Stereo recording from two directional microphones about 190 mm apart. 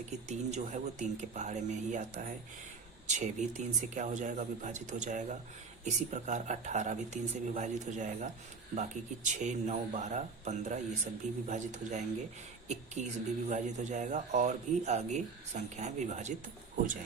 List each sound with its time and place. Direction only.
0.3 s speech: 40° right (ahead or behind)